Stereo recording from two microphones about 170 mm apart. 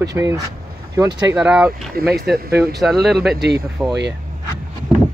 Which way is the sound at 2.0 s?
65° right (ahead or behind).